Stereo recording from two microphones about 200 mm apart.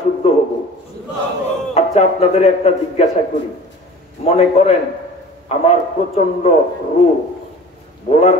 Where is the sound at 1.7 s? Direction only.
35° left (ahead or behind).